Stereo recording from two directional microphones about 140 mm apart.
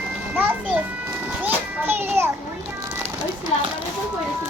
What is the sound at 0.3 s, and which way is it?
Music, 15° right (ahead or behind).